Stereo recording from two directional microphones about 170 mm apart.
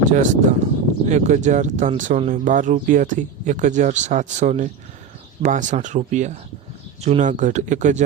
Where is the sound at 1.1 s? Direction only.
45° right (ahead or behind).